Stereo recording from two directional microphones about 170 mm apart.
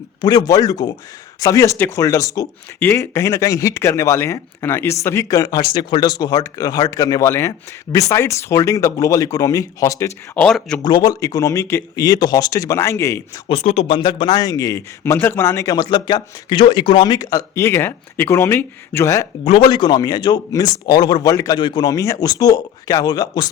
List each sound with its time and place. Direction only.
0.2 s speech: 25° left (ahead or behind)
10.3 s speech: 5° left (ahead or behind)
10.8 s speech: 25° left (ahead or behind)
13.5 s speech: 40° left (ahead or behind); by 19.3 s 15° left (ahead or behind)
19.5 s speech: 30° left (ahead or behind)